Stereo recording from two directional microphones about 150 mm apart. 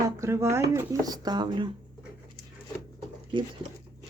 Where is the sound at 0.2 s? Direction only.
20° right (ahead or behind).